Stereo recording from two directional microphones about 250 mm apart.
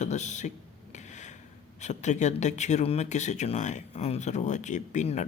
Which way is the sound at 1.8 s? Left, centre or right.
Left.